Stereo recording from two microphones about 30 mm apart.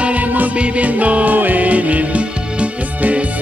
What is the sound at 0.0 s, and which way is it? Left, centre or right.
Music, right.